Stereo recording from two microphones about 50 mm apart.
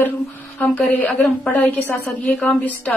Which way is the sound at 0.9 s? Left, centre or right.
Left.